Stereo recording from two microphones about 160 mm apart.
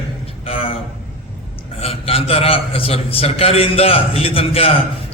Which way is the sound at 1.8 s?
40° left (ahead or behind).